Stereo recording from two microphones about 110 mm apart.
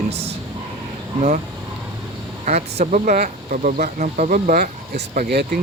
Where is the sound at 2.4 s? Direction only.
85° right.